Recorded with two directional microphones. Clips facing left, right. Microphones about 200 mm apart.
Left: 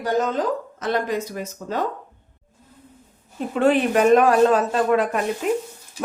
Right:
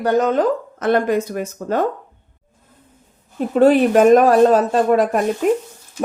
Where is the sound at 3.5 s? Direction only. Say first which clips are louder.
Right 6 dB; 40° right (ahead or behind).